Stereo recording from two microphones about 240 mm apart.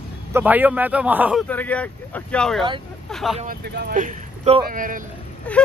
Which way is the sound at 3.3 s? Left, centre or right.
Right.